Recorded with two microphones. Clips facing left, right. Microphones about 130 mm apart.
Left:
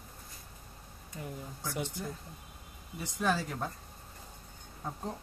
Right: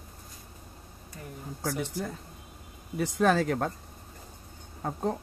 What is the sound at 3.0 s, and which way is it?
Speech, 75° right (ahead or behind).